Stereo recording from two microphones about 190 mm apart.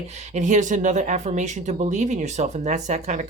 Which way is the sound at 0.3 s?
40° right (ahead or behind).